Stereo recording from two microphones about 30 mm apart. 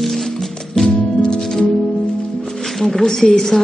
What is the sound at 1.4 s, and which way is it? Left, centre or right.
Music, centre.